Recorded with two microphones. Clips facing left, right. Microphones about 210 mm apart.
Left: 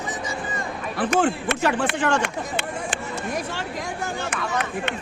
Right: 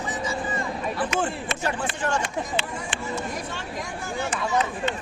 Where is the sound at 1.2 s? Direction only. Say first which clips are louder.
Left 6 dB; 75° left (ahead or behind).